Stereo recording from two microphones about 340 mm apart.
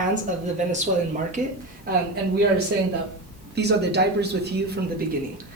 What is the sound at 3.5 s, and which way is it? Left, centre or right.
Speech, right.